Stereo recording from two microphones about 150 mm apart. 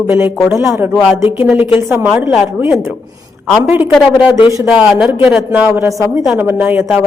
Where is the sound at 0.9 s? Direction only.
5° right (ahead or behind).